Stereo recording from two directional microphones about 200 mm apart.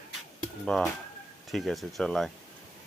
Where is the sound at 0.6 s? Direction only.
Centre (ahead or behind).